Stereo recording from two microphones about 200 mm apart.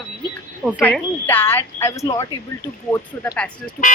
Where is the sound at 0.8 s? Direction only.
10° left (ahead or behind).